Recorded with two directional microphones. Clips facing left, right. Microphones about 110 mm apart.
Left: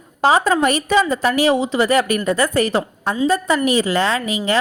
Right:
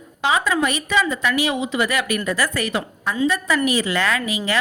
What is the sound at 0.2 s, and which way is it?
A woman's voice, 40° left (ahead or behind).